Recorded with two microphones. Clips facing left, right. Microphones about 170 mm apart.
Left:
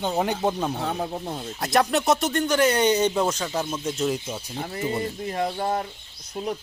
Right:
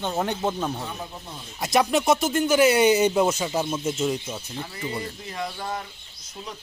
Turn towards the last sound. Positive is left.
turn(degrees=35)  # may be behind; listen again after turning